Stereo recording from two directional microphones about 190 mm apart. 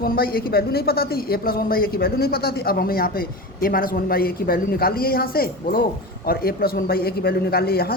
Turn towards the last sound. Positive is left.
turn(degrees=55)  # may be behind; listen again after turning